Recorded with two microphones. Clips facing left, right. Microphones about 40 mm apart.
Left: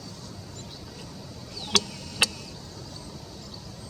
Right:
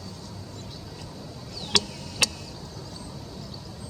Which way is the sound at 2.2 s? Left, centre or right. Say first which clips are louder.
Left 1 dB; centre.